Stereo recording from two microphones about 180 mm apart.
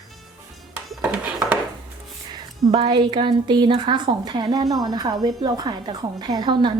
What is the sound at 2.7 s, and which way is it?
A woman's voice, 25° right (ahead or behind).